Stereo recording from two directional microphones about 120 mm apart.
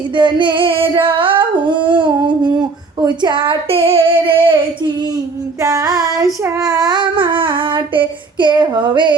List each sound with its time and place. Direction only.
0.2 s singing: 40° right (ahead or behind)
5.6 s child singing: 30° right (ahead or behind)